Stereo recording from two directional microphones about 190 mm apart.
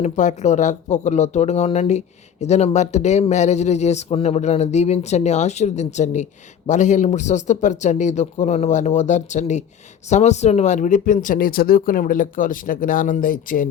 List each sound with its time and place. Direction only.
0.0 s speech: 40° left (ahead or behind)